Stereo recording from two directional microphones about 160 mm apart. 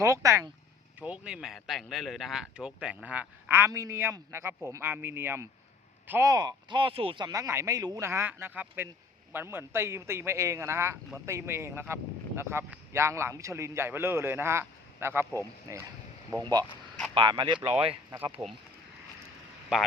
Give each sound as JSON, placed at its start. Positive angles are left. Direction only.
{"t": 0.0, "sound": "speech", "side_deg": -20}
{"t": 0.9, "sound": "speech", "side_deg": -10}
{"t": 18.2, "sound": "speech", "side_deg": -10}